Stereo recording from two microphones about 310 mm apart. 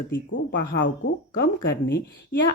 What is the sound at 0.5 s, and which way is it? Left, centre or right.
A woman's voice, left.